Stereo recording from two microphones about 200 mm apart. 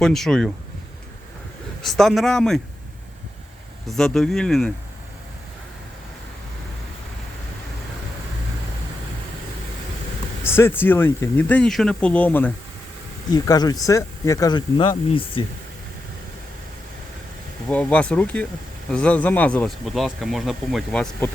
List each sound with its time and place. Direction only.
0.0 s speech: centre (ahead or behind)
1.8 s speech: centre (ahead or behind)
3.8 s speech: centre (ahead or behind)
10.4 s speech: 10° left (ahead or behind)
13.3 s speech: 20° left (ahead or behind)
17.7 s speech: 5° left (ahead or behind)